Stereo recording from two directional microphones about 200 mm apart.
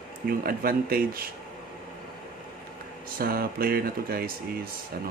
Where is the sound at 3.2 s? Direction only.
50° right (ahead or behind).